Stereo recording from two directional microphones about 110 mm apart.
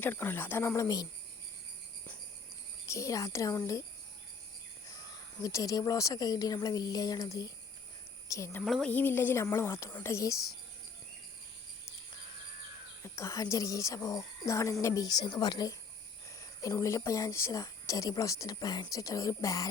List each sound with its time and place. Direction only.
0.0 s speech: 20° left (ahead or behind)
2.8 s speech: 30° left (ahead or behind)
5.4 s speech: 30° left (ahead or behind)
8.6 s speech: 5° left (ahead or behind)
8.9 s speech: 20° left (ahead or behind)
13.0 s speech: 25° left (ahead or behind)